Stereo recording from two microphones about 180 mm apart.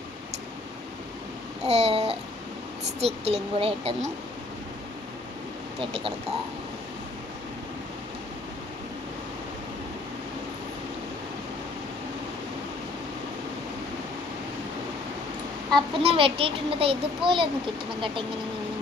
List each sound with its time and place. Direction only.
1.6 s babbling: 35° right (ahead or behind)
3.2 s speech: 35° right (ahead or behind)
5.8 s speech: 30° right (ahead or behind)
15.7 s a child's voice: 30° right (ahead or behind)